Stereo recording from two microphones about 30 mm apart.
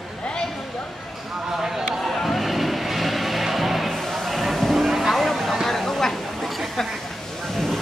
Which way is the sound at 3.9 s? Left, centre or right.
Centre.